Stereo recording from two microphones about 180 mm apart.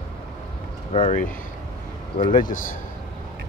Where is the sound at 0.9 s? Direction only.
40° left (ahead or behind).